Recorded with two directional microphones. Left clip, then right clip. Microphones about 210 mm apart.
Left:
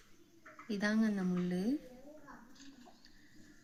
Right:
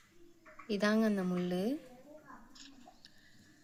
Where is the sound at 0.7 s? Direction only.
50° right (ahead or behind).